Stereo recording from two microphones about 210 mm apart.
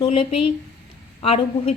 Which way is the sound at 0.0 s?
25° left (ahead or behind).